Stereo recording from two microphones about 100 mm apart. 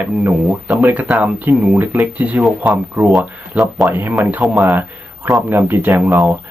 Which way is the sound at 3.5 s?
Centre (ahead or behind).